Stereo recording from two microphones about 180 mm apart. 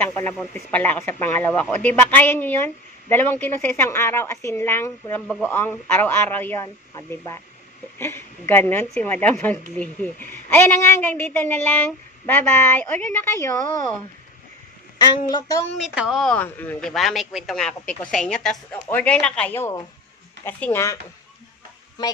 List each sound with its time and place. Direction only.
0.0 s a woman's voice: 15° left (ahead or behind)
15.3 s speech: 20° left (ahead or behind)
15.8 s a woman's voice: 5° right (ahead or behind); by 21.0 s 15° left (ahead or behind)